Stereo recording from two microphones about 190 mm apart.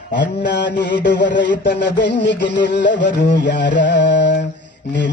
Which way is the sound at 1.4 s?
65° left (ahead or behind).